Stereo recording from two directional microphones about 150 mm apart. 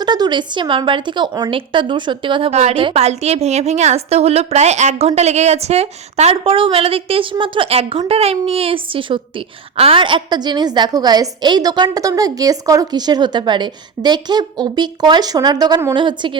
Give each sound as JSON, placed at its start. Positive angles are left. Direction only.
{"t": 0.0, "sound": "a woman's voice", "side_deg": -30}
{"t": 2.5, "sound": "a woman's voice", "side_deg": -45}